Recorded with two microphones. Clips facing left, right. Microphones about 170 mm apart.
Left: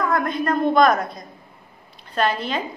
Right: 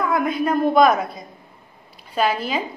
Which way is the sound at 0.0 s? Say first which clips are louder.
Right 1 dB; 5° right (ahead or behind).